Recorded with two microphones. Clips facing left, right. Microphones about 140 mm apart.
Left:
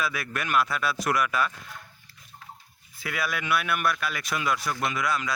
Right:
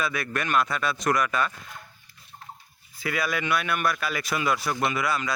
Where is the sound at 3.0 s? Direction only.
Centre (ahead or behind).